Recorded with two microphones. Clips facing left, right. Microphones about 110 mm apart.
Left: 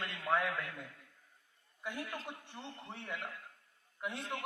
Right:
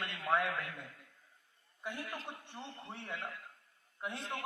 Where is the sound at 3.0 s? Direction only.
25° right (ahead or behind).